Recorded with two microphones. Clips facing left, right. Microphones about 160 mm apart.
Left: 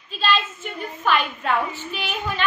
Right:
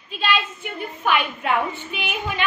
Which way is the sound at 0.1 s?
15° right (ahead or behind).